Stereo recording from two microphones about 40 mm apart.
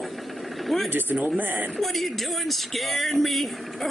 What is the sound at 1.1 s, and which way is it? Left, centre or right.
Speech, right.